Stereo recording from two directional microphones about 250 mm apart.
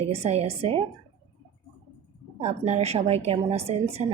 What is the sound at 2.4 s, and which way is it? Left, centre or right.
A woman's voice, right.